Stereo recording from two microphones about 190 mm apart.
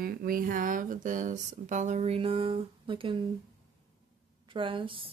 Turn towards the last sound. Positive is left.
turn(degrees=-25)  # may be behind; listen again after turning